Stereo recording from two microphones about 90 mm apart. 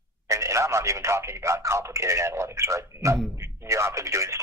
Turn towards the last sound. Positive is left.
turn(degrees=-35)  # may be behind; listen again after turning